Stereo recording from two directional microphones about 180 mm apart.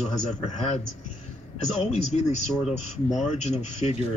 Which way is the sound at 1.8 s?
40° left (ahead or behind).